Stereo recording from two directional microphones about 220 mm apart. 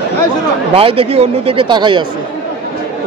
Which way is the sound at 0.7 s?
25° right (ahead or behind).